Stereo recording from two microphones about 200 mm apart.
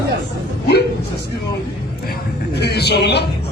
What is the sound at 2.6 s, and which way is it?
Speech, 55° left (ahead or behind).